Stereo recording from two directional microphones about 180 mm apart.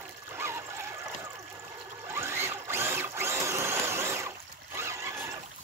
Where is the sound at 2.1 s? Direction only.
15° right (ahead or behind).